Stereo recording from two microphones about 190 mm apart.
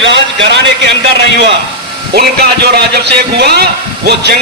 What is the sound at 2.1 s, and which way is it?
Speech, 55° right (ahead or behind).